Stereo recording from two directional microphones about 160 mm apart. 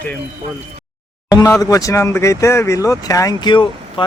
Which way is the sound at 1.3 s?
20° left (ahead or behind).